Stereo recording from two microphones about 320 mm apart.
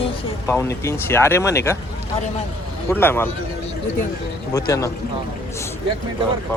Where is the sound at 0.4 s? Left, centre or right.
Centre.